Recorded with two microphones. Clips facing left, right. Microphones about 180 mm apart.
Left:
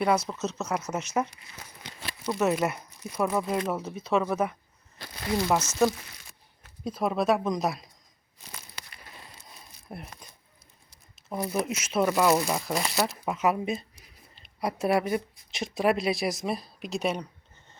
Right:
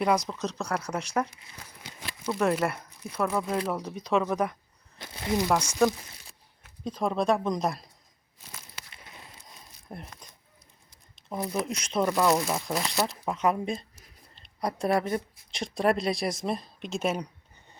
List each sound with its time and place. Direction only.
0.0 s a woman's voice: centre (ahead or behind)
1.8 s crumpling: 10° right (ahead or behind)
2.3 s a woman's voice: 10° left (ahead or behind)
4.9 s speech: 20° right (ahead or behind)
5.5 s a woman's voice: 5° left (ahead or behind)
8.9 s a sound: 20° right (ahead or behind)
9.5 s a sound: 5° left (ahead or behind)
11.6 s a woman's voice: 5° left (ahead or behind)